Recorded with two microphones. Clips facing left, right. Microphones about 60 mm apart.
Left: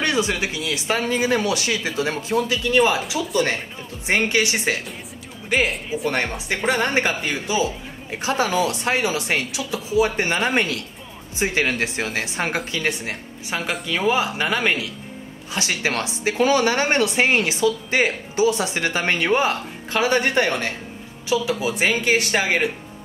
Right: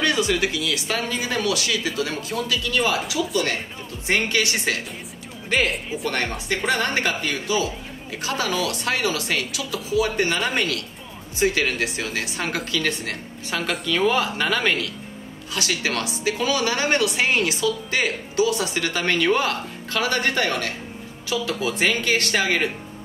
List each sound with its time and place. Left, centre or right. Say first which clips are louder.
0.0 s speech: right 1 dB; left
4.1 s speech: left 2 dB; left
5.5 s speech: left 1 dB; centre
6.0 s speech: left 2 dB; centre
15.5 s speech: left 1 dB; left